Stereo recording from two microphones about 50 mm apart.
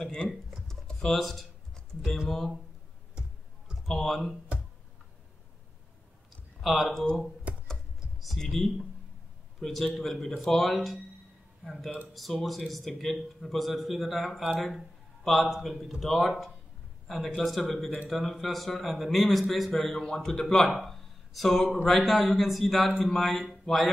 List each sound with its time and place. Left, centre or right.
0.0 s speech: centre
1.0 s speech: centre
2.2 s speech: centre
3.9 s speech: centre
6.6 s speech: centre
7.5 s computer keyboard: right
8.4 s a man's voice: centre
14.6 s a sound: centre
15.5 s speech: centre
20.7 s a sound: centre
21.8 s speech: centre